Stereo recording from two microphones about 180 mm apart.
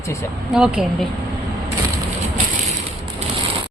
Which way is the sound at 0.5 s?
5° right (ahead or behind).